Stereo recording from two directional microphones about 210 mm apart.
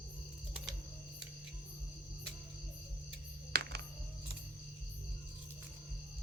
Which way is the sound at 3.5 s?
50° right (ahead or behind).